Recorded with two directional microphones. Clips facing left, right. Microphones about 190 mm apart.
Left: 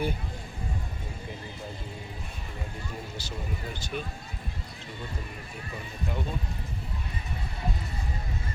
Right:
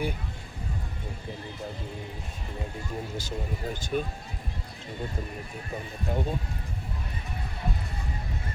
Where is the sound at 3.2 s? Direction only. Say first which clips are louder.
Right 3 dB; 50° right (ahead or behind).